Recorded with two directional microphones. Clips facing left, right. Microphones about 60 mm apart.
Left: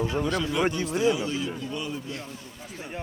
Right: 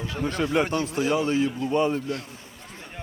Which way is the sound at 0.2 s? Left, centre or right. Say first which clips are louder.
Right 4 dB; right.